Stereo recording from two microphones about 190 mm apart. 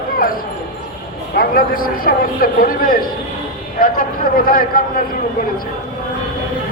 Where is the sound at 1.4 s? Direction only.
50° left (ahead or behind).